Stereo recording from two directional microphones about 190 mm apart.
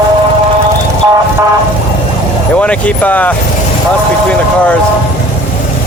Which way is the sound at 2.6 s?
5° left (ahead or behind).